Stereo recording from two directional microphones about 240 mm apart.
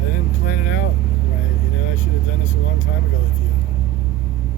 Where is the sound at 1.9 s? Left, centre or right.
Left.